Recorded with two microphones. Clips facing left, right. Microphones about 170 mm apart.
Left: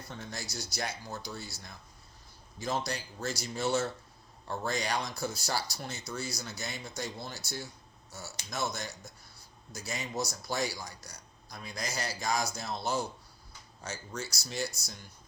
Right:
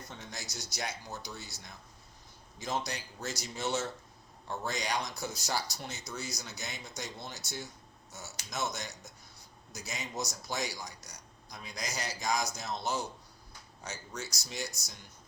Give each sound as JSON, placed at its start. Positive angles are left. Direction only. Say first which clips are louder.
{"t": 0.1, "sound": "speech", "louder": "left 6 dB", "side_deg": -20}